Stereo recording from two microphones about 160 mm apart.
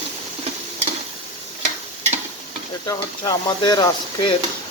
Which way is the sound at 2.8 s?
25° left (ahead or behind).